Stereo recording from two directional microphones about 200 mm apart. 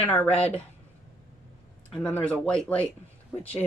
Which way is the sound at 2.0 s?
5° left (ahead or behind).